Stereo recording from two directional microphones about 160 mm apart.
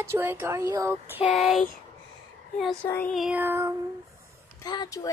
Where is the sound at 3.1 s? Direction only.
5° right (ahead or behind).